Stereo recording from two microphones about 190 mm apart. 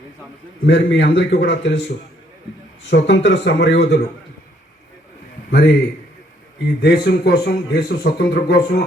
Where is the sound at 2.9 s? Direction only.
70° left (ahead or behind).